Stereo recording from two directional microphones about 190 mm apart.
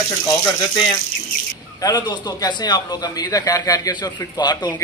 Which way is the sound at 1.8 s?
20° left (ahead or behind).